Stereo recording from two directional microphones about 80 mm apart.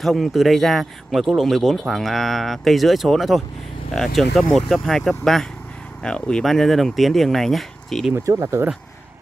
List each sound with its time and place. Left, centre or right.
0.0 s speech: centre
8.1 s speech: right